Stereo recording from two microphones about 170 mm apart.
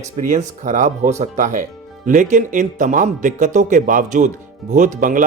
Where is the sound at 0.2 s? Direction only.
50° right (ahead or behind).